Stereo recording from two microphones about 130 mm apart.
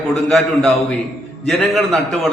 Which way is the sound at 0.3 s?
5° left (ahead or behind).